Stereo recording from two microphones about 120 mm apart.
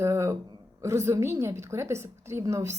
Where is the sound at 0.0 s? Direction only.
25° right (ahead or behind).